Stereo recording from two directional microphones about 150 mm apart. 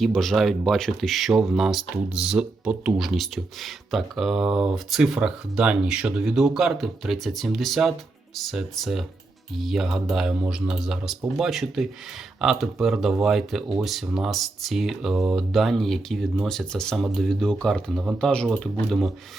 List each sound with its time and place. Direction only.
0.0 s speech: centre (ahead or behind)